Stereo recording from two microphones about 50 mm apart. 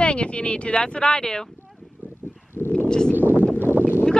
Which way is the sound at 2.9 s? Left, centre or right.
Centre.